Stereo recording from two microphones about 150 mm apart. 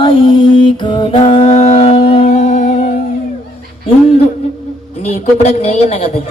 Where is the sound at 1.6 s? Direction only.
45° left (ahead or behind).